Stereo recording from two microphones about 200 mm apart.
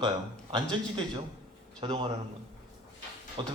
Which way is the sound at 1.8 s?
25° right (ahead or behind).